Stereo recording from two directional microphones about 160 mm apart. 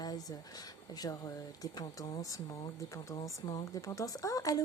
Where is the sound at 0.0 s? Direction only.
25° left (ahead or behind).